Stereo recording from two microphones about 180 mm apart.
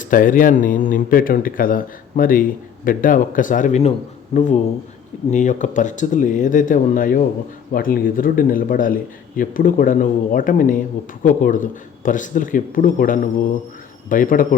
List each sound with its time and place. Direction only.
0.0 s speech: 50° left (ahead or behind)